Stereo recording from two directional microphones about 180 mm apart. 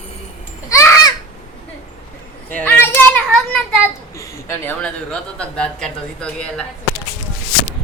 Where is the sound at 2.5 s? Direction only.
10° left (ahead or behind).